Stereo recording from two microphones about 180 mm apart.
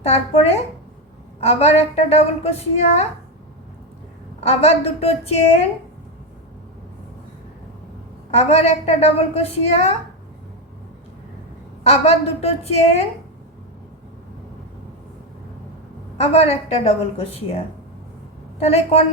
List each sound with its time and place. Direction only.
0.0 s a woman's voice: 35° left (ahead or behind)
4.4 s a woman's voice: 35° left (ahead or behind)
8.3 s a woman's voice: 35° left (ahead or behind)
11.8 s a woman's voice: 35° left (ahead or behind)
16.1 s a woman's voice: 35° left (ahead or behind)
18.6 s a woman's voice: 35° left (ahead or behind)